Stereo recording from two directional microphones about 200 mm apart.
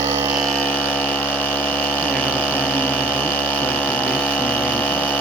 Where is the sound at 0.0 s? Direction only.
15° right (ahead or behind).